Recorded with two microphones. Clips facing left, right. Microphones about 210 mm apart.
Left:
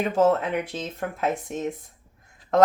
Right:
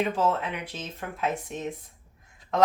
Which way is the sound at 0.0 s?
45° left (ahead or behind).